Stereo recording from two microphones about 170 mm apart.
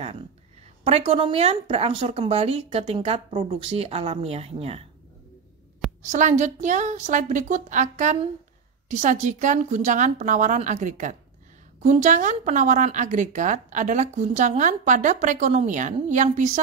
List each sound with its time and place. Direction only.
0.8 s speech: 35° right (ahead or behind)
6.0 s a woman's voice: 45° right (ahead or behind)